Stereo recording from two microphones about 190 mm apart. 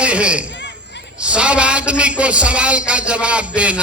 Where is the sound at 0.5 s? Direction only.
65° left (ahead or behind).